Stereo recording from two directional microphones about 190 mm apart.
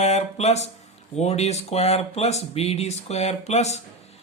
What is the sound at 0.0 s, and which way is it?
Speech, 35° left (ahead or behind).